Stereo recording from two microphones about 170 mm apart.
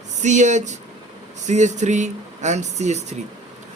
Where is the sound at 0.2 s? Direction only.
45° right (ahead or behind).